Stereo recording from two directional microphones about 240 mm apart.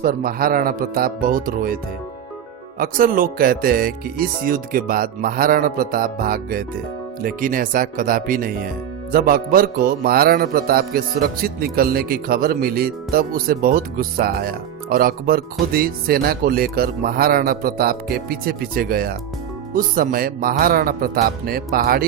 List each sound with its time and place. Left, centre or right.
0.0 s a man's voice: right